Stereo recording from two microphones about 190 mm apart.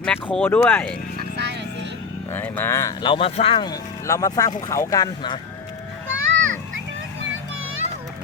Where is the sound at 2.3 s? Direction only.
10° left (ahead or behind).